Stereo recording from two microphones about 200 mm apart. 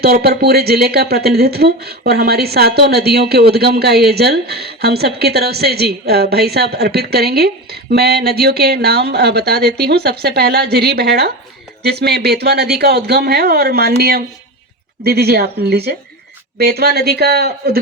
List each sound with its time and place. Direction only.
0.0 s speech: 50° right (ahead or behind)